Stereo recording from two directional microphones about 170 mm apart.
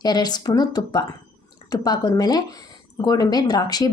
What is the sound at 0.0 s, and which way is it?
Speech, 25° left (ahead or behind).